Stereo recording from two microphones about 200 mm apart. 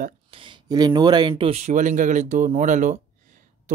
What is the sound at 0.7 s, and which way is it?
Speech, 20° right (ahead or behind).